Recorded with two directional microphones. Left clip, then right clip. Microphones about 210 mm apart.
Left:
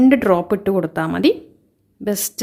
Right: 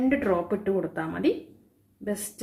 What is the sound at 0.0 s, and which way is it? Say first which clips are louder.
Speech: left 10 dB; 55° left (ahead or behind).